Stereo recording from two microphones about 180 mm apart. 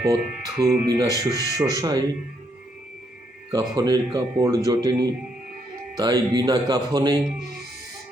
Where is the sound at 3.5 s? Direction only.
20° right (ahead or behind).